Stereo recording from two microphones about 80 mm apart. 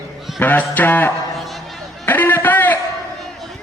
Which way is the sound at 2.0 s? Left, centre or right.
Left.